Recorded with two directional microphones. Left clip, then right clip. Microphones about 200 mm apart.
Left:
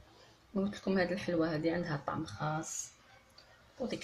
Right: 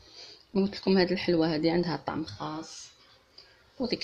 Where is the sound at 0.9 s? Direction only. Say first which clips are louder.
Right 7 dB; 35° right (ahead or behind).